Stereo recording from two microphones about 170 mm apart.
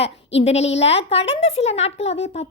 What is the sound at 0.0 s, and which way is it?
A woman's voice, 40° left (ahead or behind).